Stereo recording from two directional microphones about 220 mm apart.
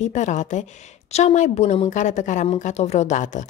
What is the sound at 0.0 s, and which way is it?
A woman's voice, 35° left (ahead or behind).